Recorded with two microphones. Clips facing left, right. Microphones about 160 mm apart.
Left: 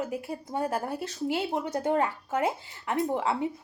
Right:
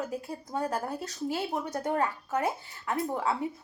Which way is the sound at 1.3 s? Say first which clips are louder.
Left 3 dB; 25° left (ahead or behind).